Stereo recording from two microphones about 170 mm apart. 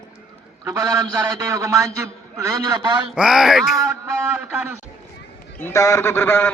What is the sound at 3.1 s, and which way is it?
Speech, 5° right (ahead or behind).